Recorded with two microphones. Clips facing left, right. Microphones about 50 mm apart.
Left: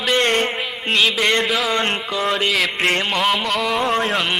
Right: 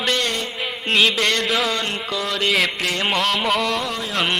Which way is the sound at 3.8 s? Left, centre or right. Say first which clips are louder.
Left 7 dB; left.